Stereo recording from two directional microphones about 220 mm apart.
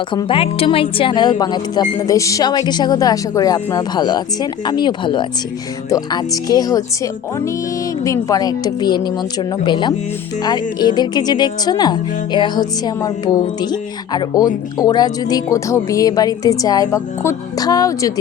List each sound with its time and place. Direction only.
0.1 s speech: 20° left (ahead or behind)